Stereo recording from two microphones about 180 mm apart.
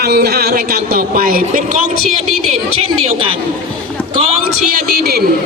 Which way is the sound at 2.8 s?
35° right (ahead or behind).